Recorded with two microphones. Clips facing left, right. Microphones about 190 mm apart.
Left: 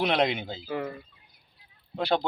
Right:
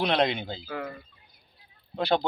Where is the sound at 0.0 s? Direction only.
Centre (ahead or behind).